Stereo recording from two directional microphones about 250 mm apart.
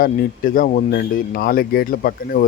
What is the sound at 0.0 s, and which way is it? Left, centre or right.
Speech, left.